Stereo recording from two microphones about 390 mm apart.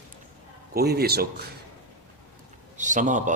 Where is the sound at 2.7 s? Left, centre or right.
Centre.